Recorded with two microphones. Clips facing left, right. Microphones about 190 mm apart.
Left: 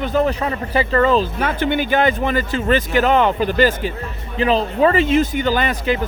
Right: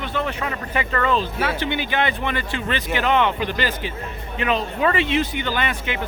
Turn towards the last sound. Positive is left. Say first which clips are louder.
# left 7 dB
turn(degrees=40)  # may be behind; listen again after turning